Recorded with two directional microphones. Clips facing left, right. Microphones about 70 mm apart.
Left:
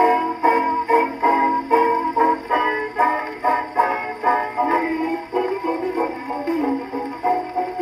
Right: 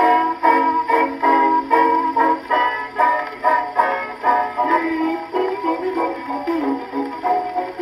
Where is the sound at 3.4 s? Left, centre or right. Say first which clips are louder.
Right 1 dB; right.